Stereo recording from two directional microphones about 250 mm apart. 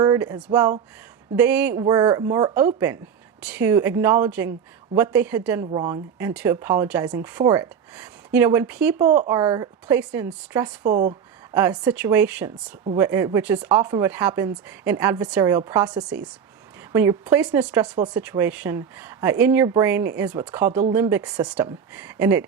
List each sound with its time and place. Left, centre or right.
0.0 s a woman's voice: centre